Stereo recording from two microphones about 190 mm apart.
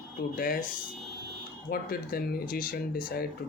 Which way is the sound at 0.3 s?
45° left (ahead or behind).